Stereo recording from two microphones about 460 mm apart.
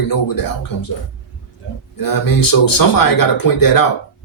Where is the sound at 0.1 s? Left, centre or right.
Left.